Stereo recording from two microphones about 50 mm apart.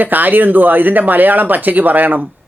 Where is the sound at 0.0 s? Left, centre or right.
Right.